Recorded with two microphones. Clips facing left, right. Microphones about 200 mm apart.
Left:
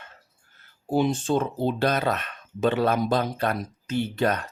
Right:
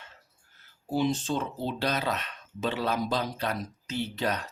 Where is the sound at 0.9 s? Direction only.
50° left (ahead or behind).